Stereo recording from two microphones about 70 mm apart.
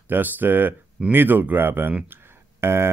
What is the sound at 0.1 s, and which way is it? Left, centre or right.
Speech, right.